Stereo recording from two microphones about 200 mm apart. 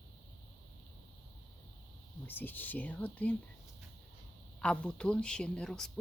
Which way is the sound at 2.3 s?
10° left (ahead or behind).